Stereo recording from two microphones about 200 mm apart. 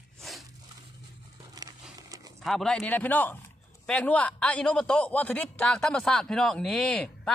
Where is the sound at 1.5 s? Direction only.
20° right (ahead or behind).